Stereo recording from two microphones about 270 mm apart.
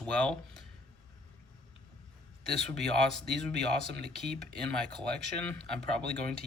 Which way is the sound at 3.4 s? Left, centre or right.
Right.